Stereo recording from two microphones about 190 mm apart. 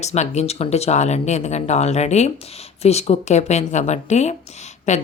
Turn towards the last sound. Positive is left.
turn(degrees=35)  # may be behind; listen again after turning